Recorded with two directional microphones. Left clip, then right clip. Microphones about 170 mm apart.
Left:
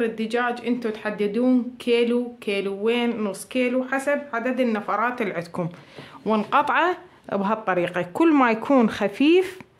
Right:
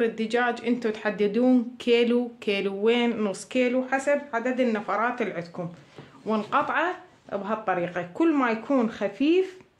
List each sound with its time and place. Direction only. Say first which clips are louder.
0.0 s speech: left 1 dB; centre (ahead or behind)
3.8 s speech: left 1 dB; 15° left (ahead or behind)
6.2 s speech: left 4 dB; 50° left (ahead or behind); by 9.5 s 70° left (ahead or behind)